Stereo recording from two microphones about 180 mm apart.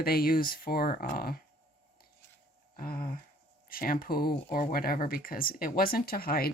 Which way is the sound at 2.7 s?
55° left (ahead or behind).